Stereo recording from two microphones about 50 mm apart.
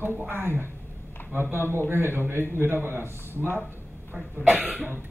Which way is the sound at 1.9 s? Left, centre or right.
Right.